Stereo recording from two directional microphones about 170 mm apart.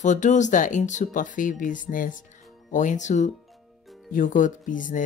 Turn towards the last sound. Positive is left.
turn(degrees=50)  # may be behind; listen again after turning